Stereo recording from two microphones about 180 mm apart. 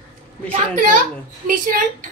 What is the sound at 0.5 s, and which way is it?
A woman's voice, 45° right (ahead or behind).